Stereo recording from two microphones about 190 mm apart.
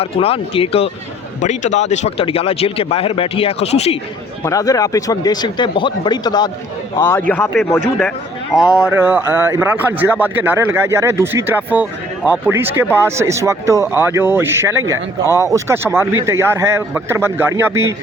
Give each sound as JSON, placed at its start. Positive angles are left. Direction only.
{"t": 0.0, "sound": "speech", "side_deg": 30}
{"t": 4.4, "sound": "speech", "side_deg": 20}